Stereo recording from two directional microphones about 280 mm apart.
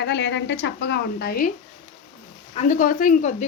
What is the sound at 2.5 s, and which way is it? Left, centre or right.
Speech, left.